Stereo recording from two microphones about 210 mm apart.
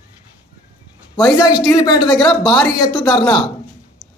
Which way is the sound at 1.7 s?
20° left (ahead or behind).